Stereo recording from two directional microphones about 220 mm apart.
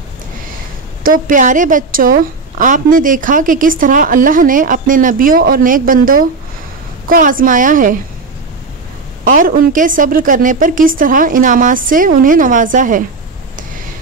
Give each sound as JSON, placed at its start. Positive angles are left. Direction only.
{"t": 1.0, "sound": "a woman's voice", "side_deg": -40}
{"t": 9.2, "sound": "a woman's voice", "side_deg": -40}